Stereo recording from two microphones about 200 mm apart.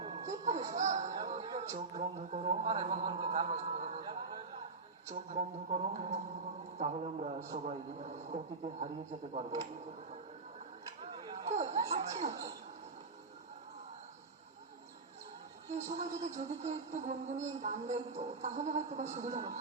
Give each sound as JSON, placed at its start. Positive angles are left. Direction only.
{"t": 0.0, "sound": "music", "side_deg": -30}
{"t": 0.8, "sound": "a sound", "side_deg": -35}
{"t": 1.2, "sound": "music", "side_deg": -35}
{"t": 2.0, "sound": "speech", "side_deg": -35}
{"t": 11.0, "sound": "a sound", "side_deg": -25}
{"t": 11.7, "sound": "speech", "side_deg": -35}
{"t": 15.9, "sound": "speech", "side_deg": -35}